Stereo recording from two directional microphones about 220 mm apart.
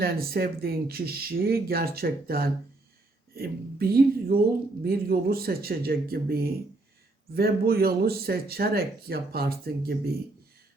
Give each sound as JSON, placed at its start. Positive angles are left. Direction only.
{"t": 0.0, "sound": "speech", "side_deg": -45}